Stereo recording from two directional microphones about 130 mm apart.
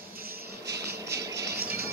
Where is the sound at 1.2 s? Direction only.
25° right (ahead or behind).